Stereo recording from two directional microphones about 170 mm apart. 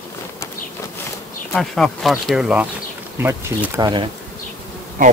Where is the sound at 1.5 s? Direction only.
Centre (ahead or behind); by 4.0 s 20° right (ahead or behind).